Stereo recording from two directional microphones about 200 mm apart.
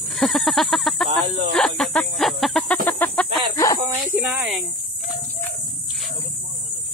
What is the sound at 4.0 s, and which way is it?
Speech, 10° right (ahead or behind).